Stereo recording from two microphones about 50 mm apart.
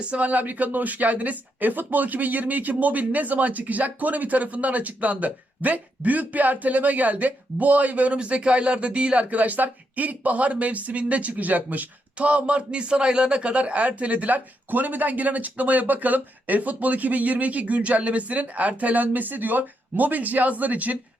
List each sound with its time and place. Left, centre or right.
0.0 s speech: right